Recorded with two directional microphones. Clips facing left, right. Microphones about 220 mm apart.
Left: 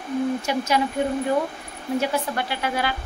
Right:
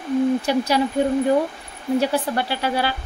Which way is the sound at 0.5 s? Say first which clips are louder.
Right 3 dB; 35° right (ahead or behind).